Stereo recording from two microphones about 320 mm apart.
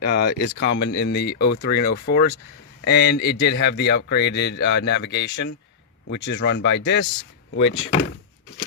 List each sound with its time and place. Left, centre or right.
0.0 s speech: left